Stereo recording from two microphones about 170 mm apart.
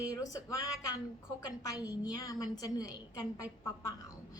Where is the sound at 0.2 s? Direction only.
20° left (ahead or behind).